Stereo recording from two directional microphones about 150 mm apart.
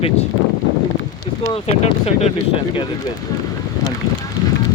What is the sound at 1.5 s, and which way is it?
Speech, 45° left (ahead or behind).